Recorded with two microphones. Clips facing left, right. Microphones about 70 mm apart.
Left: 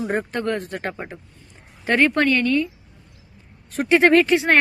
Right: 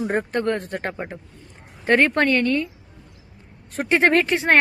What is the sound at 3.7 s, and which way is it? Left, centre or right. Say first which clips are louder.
Speech: left 3 dB; right.